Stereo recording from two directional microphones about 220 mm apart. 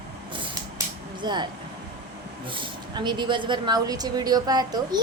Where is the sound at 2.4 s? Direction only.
20° right (ahead or behind).